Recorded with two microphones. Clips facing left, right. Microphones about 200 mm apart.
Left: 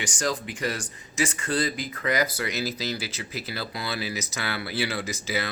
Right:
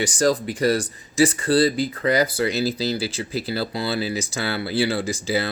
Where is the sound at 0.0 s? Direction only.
35° right (ahead or behind).